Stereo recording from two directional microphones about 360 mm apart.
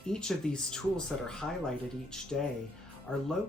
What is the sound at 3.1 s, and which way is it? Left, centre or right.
Speech, centre.